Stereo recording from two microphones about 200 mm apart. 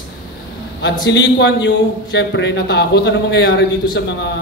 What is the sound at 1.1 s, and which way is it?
Speech, 60° left (ahead or behind).